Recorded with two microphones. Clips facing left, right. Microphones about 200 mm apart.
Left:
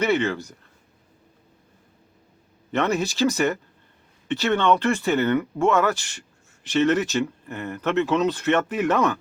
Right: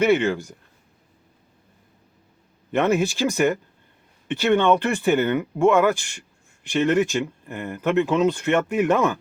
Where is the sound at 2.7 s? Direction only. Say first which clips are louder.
Right 3 dB; 15° right (ahead or behind).